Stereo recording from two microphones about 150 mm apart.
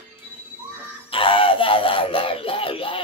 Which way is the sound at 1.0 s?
35° left (ahead or behind).